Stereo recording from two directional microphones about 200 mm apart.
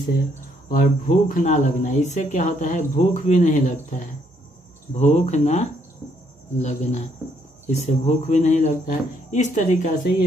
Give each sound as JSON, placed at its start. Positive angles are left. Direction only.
{"t": 0.7, "sound": "speech", "side_deg": 40}